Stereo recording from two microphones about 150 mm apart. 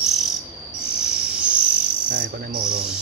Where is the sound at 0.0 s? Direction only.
Centre (ahead or behind).